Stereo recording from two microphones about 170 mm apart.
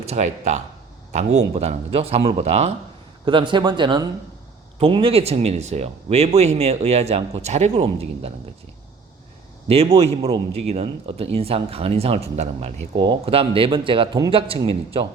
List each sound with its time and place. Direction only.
0.0 s speech: 40° right (ahead or behind)
3.2 s speech: 30° right (ahead or behind)
9.6 s speech: 35° right (ahead or behind)